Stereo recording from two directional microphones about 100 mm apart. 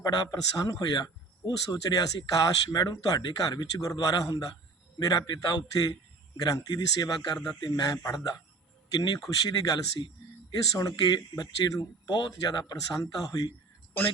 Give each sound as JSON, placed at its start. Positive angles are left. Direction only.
{"t": 0.0, "sound": "a man's voice", "side_deg": 45}